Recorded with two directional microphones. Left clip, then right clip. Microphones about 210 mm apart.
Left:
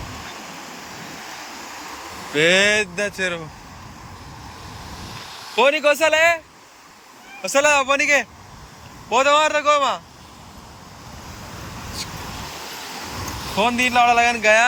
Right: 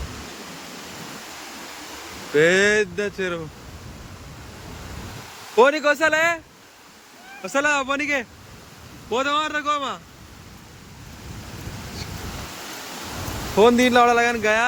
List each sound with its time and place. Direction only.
2.3 s speech: 15° right (ahead or behind)
5.5 s speech: 20° right (ahead or behind)
7.4 s speech: 15° right (ahead or behind)
13.6 s speech: 30° right (ahead or behind)